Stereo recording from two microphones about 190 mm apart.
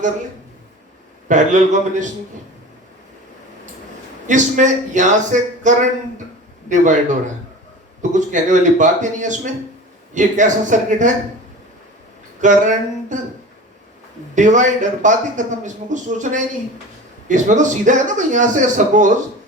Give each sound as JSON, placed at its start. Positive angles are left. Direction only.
{"t": 1.3, "sound": "speech", "side_deg": -40}
{"t": 4.3, "sound": "speech", "side_deg": -40}
{"t": 12.4, "sound": "speech", "side_deg": -40}
{"t": 14.3, "sound": "speech", "side_deg": -40}